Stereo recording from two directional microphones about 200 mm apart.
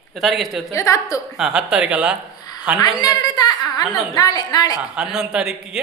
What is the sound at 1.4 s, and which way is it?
Speech, 5° right (ahead or behind).